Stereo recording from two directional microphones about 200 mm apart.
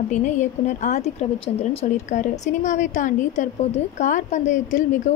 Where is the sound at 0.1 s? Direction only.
40° left (ahead or behind).